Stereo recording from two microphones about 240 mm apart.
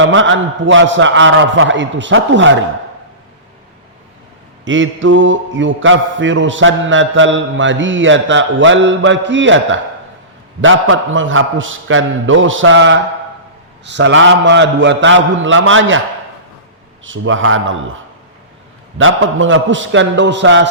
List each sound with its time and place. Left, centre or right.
0.0 s mantra: right
4.6 s mantra: right
17.1 s mantra: right
18.9 s mantra: right